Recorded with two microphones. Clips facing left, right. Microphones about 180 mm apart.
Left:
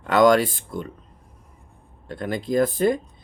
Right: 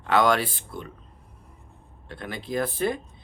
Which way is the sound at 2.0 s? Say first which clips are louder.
Left 8 dB; 45° left (ahead or behind).